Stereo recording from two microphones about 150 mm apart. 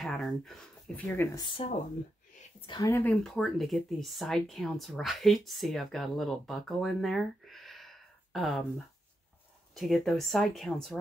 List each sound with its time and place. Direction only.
0.0 s a sound: centre (ahead or behind)
1.0 s speech: 15° left (ahead or behind)
2.6 s speech: 30° left (ahead or behind)
2.9 s speech: 15° left (ahead or behind)
3.3 s speech: centre (ahead or behind)